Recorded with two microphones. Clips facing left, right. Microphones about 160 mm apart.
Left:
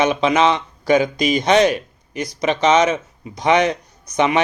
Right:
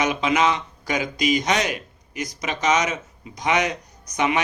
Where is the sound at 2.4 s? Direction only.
25° left (ahead or behind).